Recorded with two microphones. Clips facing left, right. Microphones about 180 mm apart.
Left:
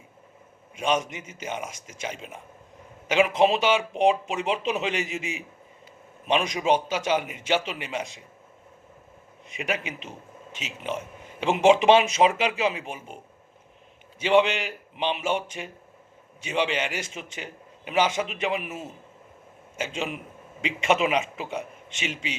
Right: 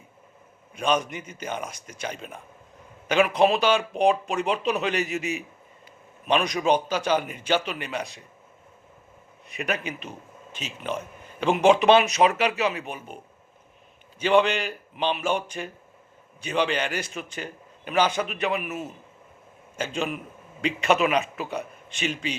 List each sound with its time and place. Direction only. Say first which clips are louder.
0.8 s a man's voice: right 1 dB; 20° left (ahead or behind)
5.0 s a man's voice: right 4 dB; 90° left
6.2 s a man's voice: right 1 dB; 25° left (ahead or behind)
9.5 s a man's voice: right 1 dB; 25° left (ahead or behind)
11.3 s a man's voice: even; 25° left (ahead or behind)
14.2 s a man's voice: even; 20° left (ahead or behind)